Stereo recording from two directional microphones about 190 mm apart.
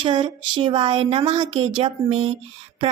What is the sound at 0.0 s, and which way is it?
A woman's voice, 25° right (ahead or behind).